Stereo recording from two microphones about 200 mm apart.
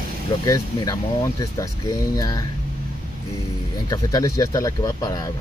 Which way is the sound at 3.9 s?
15° left (ahead or behind).